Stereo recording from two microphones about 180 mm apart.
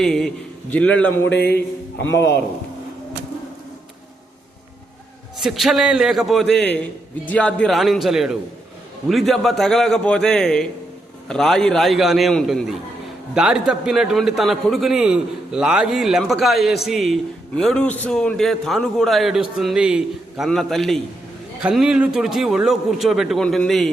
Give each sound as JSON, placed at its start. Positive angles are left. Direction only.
{"t": 0.0, "sound": "a man's voice", "side_deg": 5}
{"t": 1.3, "sound": "a sound", "side_deg": 65}
{"t": 5.4, "sound": "a man's voice", "side_deg": 0}